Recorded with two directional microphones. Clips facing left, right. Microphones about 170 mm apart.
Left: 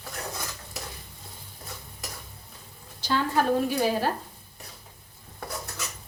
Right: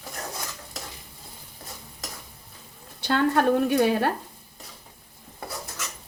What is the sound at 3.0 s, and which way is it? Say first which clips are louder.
A woman's voice: right 4 dB; 60° right (ahead or behind).